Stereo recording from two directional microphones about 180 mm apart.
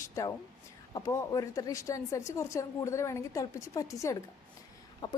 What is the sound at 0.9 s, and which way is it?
A woman's voice, 20° left (ahead or behind).